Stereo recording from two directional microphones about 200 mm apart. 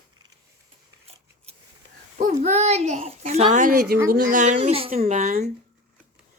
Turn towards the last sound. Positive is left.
turn(degrees=-35)  # may be behind; listen again after turning